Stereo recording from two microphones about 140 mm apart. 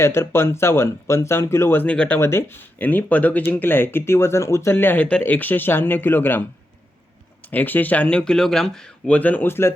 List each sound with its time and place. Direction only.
0.0 s speech: 20° left (ahead or behind)
7.5 s speech: 15° left (ahead or behind)